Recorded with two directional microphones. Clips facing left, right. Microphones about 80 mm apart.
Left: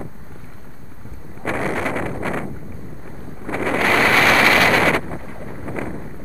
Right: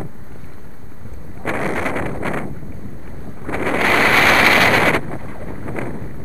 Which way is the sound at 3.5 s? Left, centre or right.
Right.